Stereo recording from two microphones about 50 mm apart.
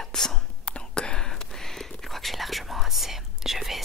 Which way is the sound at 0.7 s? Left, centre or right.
Centre.